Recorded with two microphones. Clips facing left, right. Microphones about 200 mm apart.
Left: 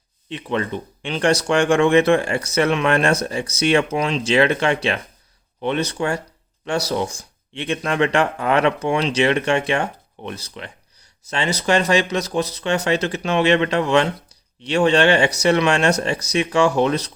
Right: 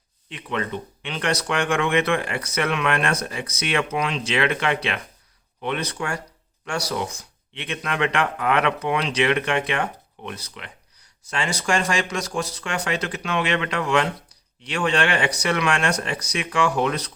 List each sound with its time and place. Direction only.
0.3 s speech: 25° left (ahead or behind)